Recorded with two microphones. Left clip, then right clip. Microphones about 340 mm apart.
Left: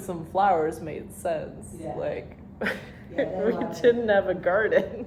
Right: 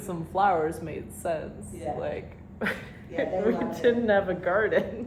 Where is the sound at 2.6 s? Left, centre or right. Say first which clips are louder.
Left 1 dB; left.